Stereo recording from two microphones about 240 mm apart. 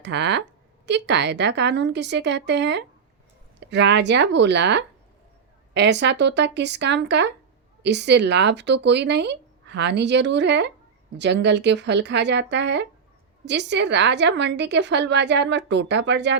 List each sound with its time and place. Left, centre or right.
0.0 s a woman's voice: right